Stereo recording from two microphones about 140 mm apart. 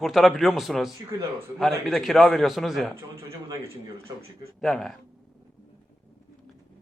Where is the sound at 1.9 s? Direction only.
Centre (ahead or behind).